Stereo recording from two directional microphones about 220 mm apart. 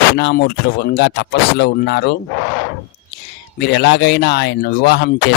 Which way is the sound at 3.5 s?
50° left (ahead or behind).